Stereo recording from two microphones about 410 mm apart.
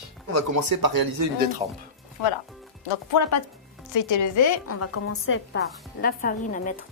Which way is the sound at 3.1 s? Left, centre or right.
Left.